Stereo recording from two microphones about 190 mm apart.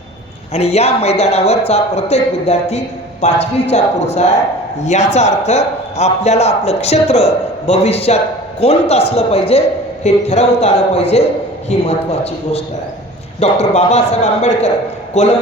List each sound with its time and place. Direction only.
0.5 s a man's voice: 35° left (ahead or behind)
4.8 s a man's voice: 35° left (ahead or behind)